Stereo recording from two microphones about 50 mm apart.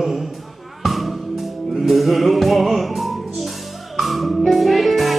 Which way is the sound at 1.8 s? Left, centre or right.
Centre.